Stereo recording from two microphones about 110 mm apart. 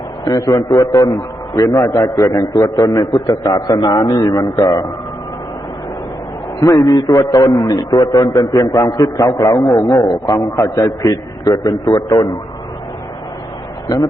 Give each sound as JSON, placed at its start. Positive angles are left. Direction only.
{"t": 0.3, "sound": "a man's voice", "side_deg": 35}
{"t": 6.6, "sound": "a man's voice", "side_deg": 35}
{"t": 13.8, "sound": "speech", "side_deg": 40}